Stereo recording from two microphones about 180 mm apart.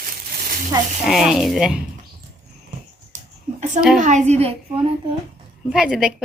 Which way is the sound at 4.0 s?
40° right (ahead or behind).